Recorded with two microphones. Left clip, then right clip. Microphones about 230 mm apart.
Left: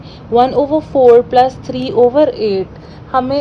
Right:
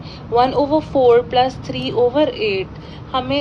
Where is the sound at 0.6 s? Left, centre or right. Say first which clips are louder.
Left 4 dB; right.